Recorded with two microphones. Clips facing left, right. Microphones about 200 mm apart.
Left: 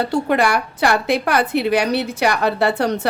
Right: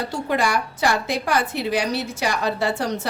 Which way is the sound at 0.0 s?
60° left (ahead or behind).